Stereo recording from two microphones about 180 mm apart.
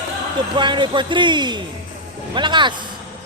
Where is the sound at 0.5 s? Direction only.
25° right (ahead or behind).